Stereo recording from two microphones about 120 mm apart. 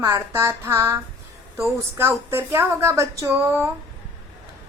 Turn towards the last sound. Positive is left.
turn(degrees=-20)  # may be behind; listen again after turning